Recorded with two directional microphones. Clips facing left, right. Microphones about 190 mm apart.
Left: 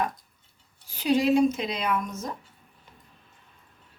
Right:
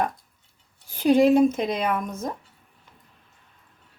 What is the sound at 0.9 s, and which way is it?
Speech, 50° right (ahead or behind).